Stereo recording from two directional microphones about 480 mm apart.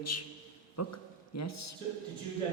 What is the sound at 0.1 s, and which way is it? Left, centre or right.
Speech, left.